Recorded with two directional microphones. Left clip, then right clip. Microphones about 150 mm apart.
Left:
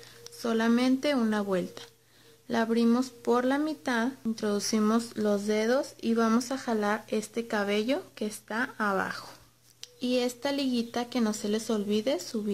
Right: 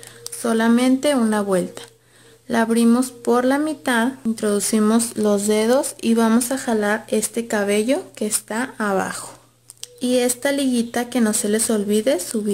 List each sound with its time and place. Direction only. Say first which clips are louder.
0.4 s speech: right 9 dB; 5° left (ahead or behind)